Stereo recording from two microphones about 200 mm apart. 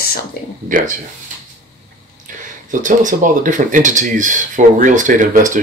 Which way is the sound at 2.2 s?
40° right (ahead or behind).